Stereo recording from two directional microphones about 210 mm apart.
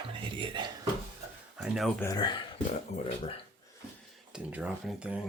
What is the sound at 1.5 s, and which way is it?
Speech, 5° right (ahead or behind).